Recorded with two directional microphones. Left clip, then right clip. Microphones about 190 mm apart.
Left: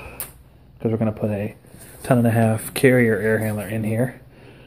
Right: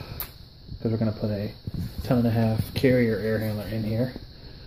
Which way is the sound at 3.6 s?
10° left (ahead or behind).